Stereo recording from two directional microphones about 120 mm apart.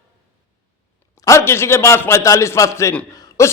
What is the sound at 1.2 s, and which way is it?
A man's voice, 25° left (ahead or behind).